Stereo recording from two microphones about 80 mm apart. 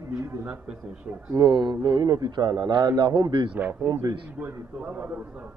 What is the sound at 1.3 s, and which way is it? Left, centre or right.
A man's voice, right.